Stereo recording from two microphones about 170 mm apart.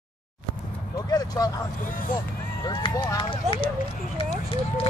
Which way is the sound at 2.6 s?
25° left (ahead or behind).